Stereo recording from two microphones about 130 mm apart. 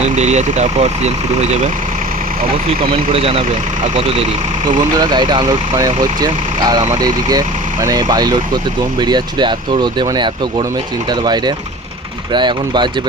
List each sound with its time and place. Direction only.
0.0 s speech: 60° right (ahead or behind)
3.1 s speech: 45° right (ahead or behind)
4.7 s speech: 35° right (ahead or behind)